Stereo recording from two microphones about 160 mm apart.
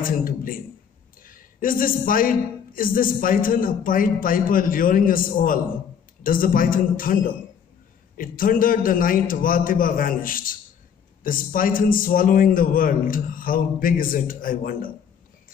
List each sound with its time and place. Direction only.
0.0 s a man's voice: 60° left (ahead or behind)